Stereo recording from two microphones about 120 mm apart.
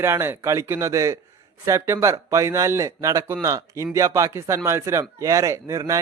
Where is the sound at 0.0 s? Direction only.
20° right (ahead or behind).